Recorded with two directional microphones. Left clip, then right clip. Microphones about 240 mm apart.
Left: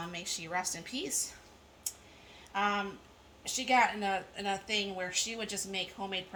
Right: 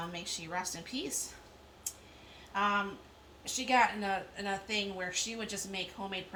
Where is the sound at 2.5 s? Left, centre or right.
Left.